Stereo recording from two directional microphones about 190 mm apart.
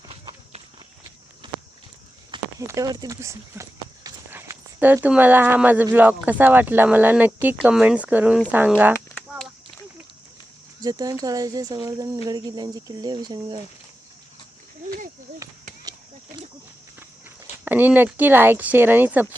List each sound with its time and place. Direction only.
0.1 s clip-clop: 30° right (ahead or behind)
1.4 s walk: 25° right (ahead or behind)
2.3 s speech: 15° right (ahead or behind)
10.8 s speech: 20° right (ahead or behind)
14.8 s a sound: 45° right (ahead or behind)
15.8 s a sound: 20° right (ahead or behind)
17.7 s speech: 10° right (ahead or behind)